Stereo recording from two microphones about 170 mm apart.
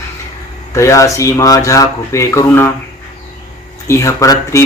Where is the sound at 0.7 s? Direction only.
15° left (ahead or behind).